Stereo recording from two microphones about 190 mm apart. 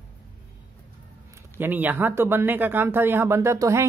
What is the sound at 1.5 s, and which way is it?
Speech, 10° right (ahead or behind).